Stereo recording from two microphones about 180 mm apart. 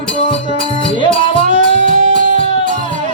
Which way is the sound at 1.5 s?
40° right (ahead or behind).